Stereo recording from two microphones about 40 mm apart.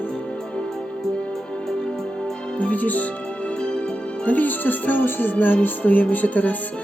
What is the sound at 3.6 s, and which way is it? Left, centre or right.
Music, left.